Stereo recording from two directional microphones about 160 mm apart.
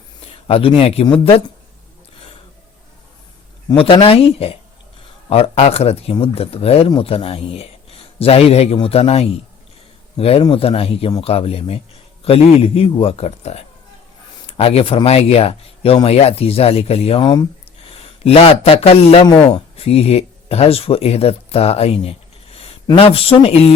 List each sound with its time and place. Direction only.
0.4 s speech: 35° left (ahead or behind)
3.7 s speech: 30° left (ahead or behind)